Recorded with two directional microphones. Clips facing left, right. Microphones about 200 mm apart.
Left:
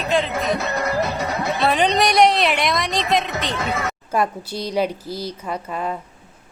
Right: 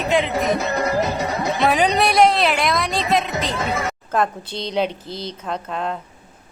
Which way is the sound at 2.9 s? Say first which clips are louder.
Right 1 dB; centre (ahead or behind).